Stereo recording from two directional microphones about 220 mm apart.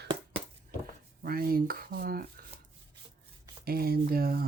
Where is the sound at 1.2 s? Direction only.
40° right (ahead or behind).